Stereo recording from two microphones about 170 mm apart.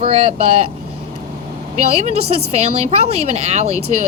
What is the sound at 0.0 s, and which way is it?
Speech, 35° right (ahead or behind).